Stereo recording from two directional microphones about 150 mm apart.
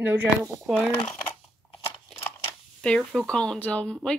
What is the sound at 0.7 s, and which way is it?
Speech, 15° left (ahead or behind).